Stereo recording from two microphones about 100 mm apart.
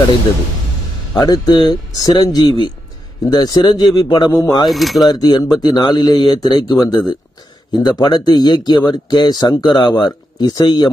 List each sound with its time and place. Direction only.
1.1 s speech: 40° left (ahead or behind)
4.6 s speech: centre (ahead or behind)
5.0 s speech: 45° left (ahead or behind)